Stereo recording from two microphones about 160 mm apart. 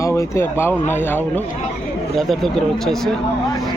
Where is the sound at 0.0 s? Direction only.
15° left (ahead or behind); by 3.1 s centre (ahead or behind).